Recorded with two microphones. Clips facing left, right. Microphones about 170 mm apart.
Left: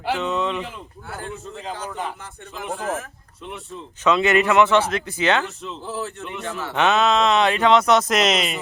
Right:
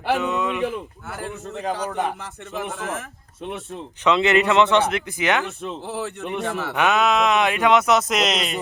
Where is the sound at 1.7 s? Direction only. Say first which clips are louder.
Right 5 dB; 70° right (ahead or behind).